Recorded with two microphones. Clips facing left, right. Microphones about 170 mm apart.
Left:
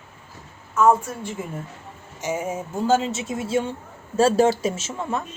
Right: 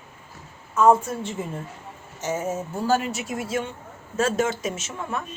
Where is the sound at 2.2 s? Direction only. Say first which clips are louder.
Even; 10° left (ahead or behind).